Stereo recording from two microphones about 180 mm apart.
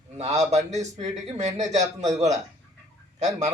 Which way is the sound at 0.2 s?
40° right (ahead or behind).